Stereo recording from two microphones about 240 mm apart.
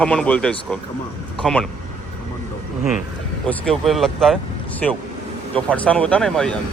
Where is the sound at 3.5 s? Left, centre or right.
Centre.